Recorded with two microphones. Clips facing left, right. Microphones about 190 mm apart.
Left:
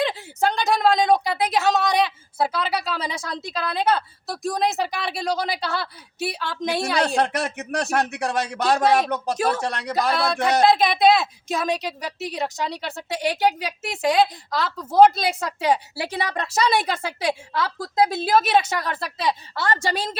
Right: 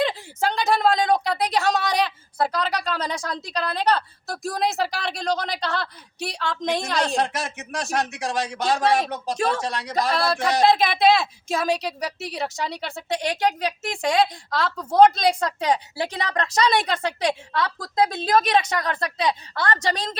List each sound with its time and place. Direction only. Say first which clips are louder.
0.0 s a woman's voice: left 1 dB; centre (ahead or behind)
7.2 s speech: left 3 dB; 60° left (ahead or behind)
10.1 s a woman's voice: left 1 dB; centre (ahead or behind)